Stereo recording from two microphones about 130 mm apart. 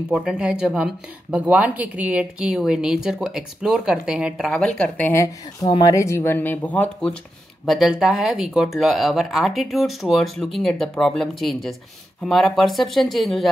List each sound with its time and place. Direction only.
0.1 s speech: 5° right (ahead or behind)
7.6 s speech: centre (ahead or behind)